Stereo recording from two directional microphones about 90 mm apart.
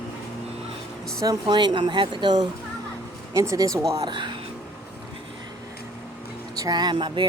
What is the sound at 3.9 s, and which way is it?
Speech, 50° right (ahead or behind).